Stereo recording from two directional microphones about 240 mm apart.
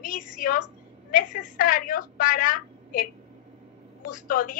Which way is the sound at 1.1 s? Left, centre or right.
Left.